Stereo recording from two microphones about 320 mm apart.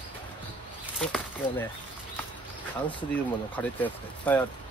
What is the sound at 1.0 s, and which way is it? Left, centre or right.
Speech, centre.